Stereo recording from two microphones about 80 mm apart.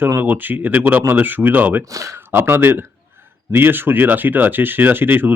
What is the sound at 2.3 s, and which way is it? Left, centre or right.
Speech, right.